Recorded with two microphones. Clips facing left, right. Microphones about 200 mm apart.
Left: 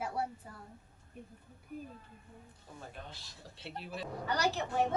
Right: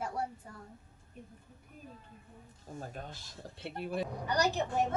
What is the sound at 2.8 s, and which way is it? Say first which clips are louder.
Speech: right 2 dB; 45° right (ahead or behind).